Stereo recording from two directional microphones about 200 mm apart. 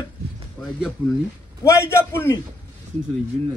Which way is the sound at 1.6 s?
15° left (ahead or behind).